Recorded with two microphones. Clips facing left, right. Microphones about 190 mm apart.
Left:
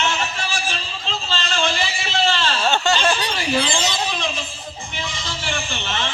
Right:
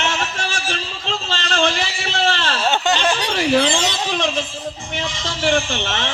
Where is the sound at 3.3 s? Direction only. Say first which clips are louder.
Right 5 dB; 70° right (ahead or behind).